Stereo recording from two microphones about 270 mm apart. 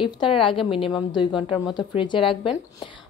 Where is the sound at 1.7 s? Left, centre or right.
Centre.